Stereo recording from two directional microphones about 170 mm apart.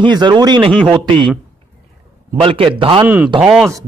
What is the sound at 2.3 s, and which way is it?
Speech, 35° right (ahead or behind).